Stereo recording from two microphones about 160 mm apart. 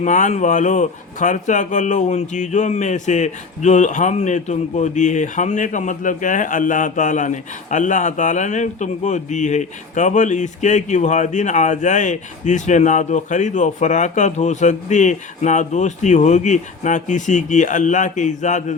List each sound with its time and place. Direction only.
0.0 s speech: 50° left (ahead or behind)